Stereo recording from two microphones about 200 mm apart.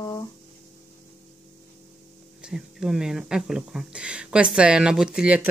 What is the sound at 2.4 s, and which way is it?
Speech, centre (ahead or behind).